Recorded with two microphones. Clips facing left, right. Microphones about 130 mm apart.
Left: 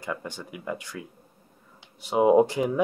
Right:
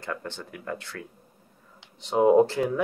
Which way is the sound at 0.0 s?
10° left (ahead or behind).